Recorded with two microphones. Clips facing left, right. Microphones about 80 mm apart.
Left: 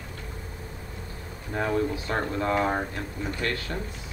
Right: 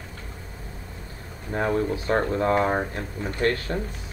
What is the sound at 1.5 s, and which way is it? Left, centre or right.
Speech, right.